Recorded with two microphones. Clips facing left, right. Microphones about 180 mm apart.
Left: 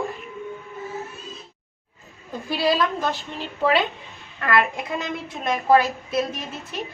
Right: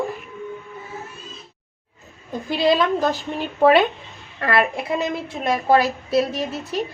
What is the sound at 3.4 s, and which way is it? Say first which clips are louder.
Speech: right 7 dB; 55° right (ahead or behind).